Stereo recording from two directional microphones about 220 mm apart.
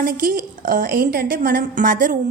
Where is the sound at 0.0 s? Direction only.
40° right (ahead or behind).